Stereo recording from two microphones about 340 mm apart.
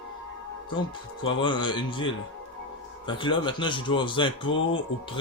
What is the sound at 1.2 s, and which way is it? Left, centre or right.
Speech, centre.